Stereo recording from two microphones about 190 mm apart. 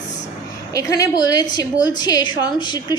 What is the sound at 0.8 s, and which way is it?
A woman's voice, 15° left (ahead or behind).